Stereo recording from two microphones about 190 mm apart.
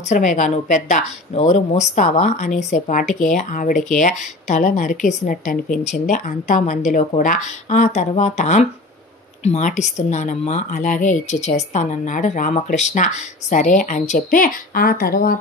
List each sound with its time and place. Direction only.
0.1 s speech: 40° left (ahead or behind)